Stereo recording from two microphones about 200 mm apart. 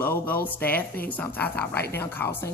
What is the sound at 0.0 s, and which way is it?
A woman's voice, 10° left (ahead or behind).